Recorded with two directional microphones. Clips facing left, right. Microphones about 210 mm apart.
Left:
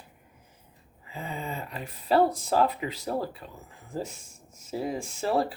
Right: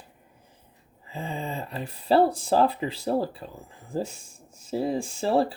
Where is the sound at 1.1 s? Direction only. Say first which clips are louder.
Right 3 dB; 30° right (ahead or behind).